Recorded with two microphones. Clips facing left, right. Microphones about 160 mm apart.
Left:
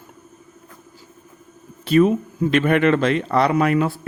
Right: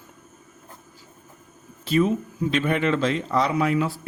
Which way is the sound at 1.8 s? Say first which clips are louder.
Left 5 dB; 60° left (ahead or behind).